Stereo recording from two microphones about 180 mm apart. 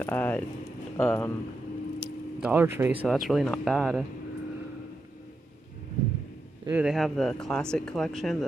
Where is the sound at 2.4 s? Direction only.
10° right (ahead or behind).